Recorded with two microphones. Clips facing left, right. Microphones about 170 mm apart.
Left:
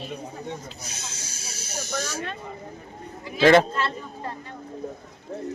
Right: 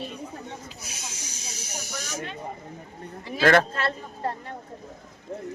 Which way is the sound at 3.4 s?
15° left (ahead or behind).